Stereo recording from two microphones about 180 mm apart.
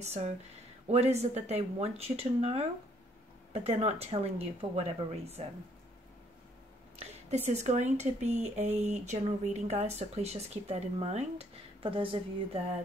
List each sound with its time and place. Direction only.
0.8 s speech: 35° right (ahead or behind)
7.0 s speech: 35° right (ahead or behind)